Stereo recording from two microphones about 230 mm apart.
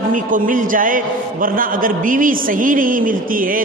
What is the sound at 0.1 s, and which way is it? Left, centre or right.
A man's voice, right.